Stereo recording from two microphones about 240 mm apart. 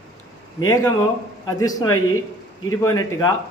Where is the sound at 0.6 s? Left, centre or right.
Centre.